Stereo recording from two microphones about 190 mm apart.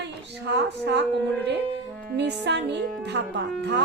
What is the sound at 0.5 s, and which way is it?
Speech, 65° right (ahead or behind).